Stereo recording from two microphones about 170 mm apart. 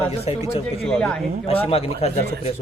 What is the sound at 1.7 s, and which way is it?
Speech, 35° left (ahead or behind).